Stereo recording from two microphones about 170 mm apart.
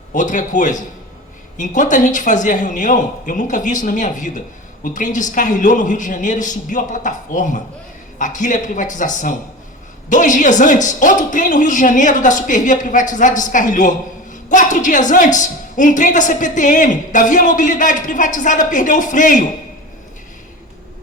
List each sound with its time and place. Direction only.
0.1 s speech: 50° left (ahead or behind)